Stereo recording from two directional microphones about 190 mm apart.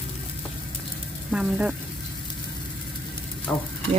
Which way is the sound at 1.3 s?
5° right (ahead or behind).